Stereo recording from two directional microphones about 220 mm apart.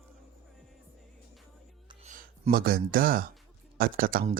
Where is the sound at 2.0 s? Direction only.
40° right (ahead or behind).